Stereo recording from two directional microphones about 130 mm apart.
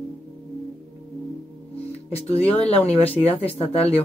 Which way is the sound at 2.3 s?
50° left (ahead or behind).